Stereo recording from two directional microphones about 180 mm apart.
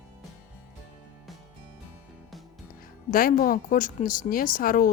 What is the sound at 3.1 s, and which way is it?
Speech, 50° left (ahead or behind).